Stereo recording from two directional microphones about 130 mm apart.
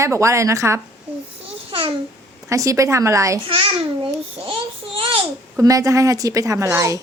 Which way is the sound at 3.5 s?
40° right (ahead or behind).